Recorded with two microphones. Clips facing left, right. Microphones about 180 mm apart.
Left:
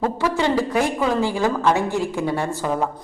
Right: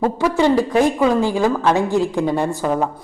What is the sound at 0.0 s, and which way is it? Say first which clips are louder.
A man's voice: right 4 dB; 15° right (ahead or behind).